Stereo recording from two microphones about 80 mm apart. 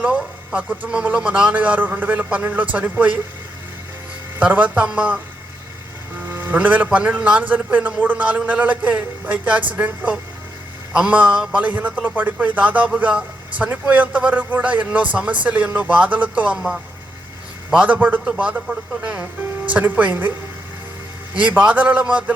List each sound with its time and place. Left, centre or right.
0.0 s speech: centre
4.4 s speech: centre
6.2 s speech: right
21.3 s speech: centre